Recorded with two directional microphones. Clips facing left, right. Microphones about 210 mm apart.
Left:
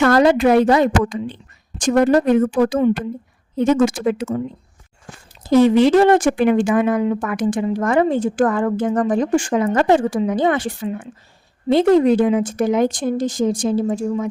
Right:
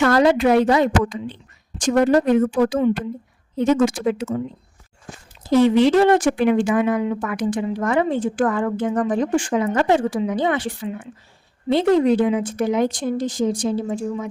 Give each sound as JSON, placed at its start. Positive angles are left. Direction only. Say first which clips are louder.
{"t": 0.0, "sound": "speech", "louder": "left 2 dB", "side_deg": 50}
{"t": 5.5, "sound": "speech", "louder": "left 2 dB", "side_deg": 45}